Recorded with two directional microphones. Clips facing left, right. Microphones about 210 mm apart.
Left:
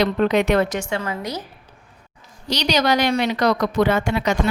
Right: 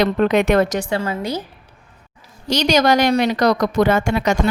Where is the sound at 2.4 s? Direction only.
50° right (ahead or behind).